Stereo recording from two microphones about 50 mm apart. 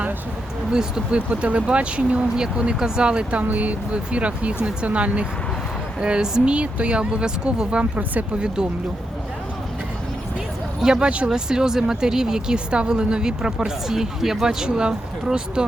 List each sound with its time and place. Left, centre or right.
0.7 s speech: centre
1.3 s speech: right
10.8 s speech: centre